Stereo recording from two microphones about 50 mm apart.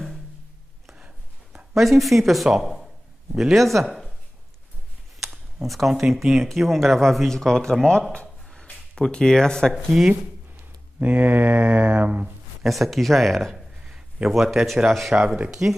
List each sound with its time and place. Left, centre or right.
0.9 s a sound: right
1.7 s speech: centre
5.6 s speech: centre
8.1 s a sound: centre
8.9 s speech: centre
11.0 s speech: right
12.6 s speech: centre
13.8 s a man's voice: centre
15.2 s speech: right